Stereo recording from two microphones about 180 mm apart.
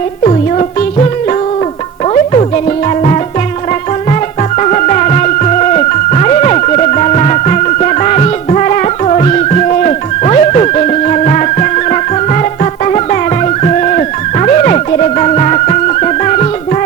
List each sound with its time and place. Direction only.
4.6 s music: 40° left (ahead or behind)
13.7 s music: 40° left (ahead or behind)